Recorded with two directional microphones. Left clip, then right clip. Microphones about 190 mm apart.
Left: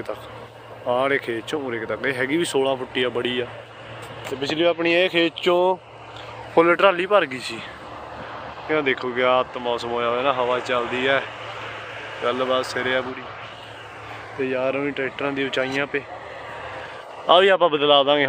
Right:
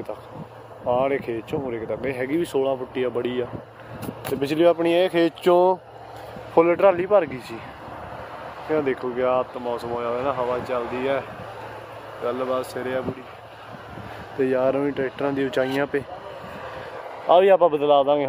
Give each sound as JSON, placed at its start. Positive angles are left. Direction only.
{"t": 0.8, "sound": "speech", "side_deg": -5}
{"t": 4.4, "sound": "speech", "side_deg": -40}
{"t": 4.7, "sound": "speech", "side_deg": -20}
{"t": 5.2, "sound": "speech", "side_deg": -30}
{"t": 6.5, "sound": "speech", "side_deg": -5}
{"t": 8.6, "sound": "speech", "side_deg": -15}
{"t": 9.1, "sound": "speech", "side_deg": -5}
{"t": 12.3, "sound": "speech", "side_deg": 0}
{"t": 14.4, "sound": "speech", "side_deg": -35}
{"t": 17.3, "sound": "speech", "side_deg": -10}